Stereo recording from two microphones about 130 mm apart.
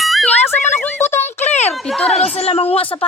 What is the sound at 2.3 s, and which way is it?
Speech, 50° left (ahead or behind).